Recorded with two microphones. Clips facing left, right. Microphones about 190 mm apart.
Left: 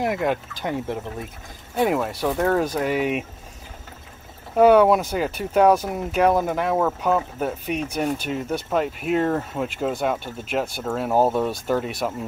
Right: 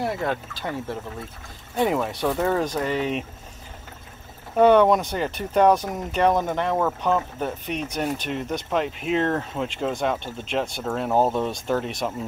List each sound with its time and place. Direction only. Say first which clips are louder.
0.0 s speech: left 3 dB; 15° left (ahead or behind)
1.8 s speech: left 1 dB; 5° left (ahead or behind)
4.6 s speech: left 1 dB; 5° left (ahead or behind)